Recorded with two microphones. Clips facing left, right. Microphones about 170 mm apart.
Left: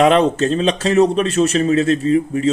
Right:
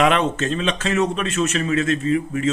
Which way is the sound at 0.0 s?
35° left (ahead or behind).